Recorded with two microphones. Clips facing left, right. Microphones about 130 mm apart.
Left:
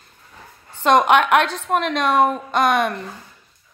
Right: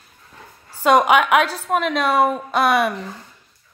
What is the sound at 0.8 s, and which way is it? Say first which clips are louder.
A woman's voice: even; 5° right (ahead or behind).